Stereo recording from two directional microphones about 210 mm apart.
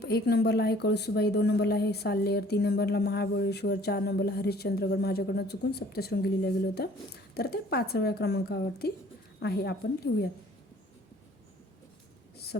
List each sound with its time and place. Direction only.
0.0 s speech: 50° left (ahead or behind)